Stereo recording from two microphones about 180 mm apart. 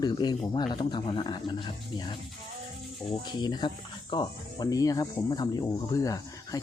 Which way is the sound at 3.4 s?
25° left (ahead or behind).